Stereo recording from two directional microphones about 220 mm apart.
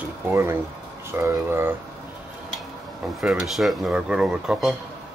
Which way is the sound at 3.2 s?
Centre (ahead or behind).